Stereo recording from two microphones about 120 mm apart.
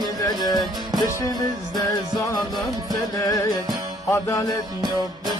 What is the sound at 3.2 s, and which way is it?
Music, 30° left (ahead or behind).